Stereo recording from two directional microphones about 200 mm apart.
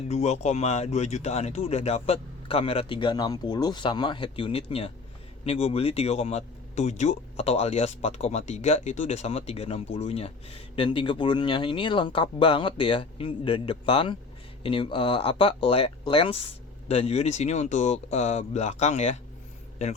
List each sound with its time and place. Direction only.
0.1 s speech: 35° left (ahead or behind)